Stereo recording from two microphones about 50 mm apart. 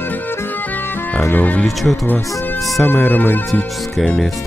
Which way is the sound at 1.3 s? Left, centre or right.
Left.